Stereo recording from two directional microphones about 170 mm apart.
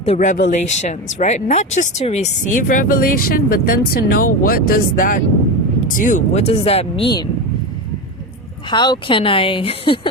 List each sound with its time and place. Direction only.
0.0 s speech: 40° left (ahead or behind)
8.7 s speech: 25° left (ahead or behind)